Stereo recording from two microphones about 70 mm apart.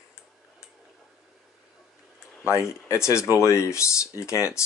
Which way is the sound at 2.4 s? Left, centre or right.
Left.